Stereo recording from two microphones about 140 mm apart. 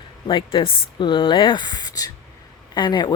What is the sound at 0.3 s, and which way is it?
A woman's voice, 35° left (ahead or behind).